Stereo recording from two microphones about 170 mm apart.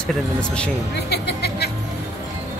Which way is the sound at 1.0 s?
75° left (ahead or behind).